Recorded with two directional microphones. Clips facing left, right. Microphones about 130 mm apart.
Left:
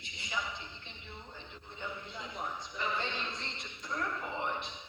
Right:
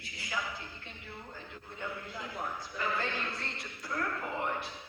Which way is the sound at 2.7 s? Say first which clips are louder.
Right 2 dB; 20° left (ahead or behind).